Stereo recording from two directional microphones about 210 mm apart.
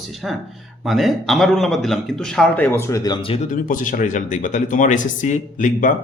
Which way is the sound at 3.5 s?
40° left (ahead or behind).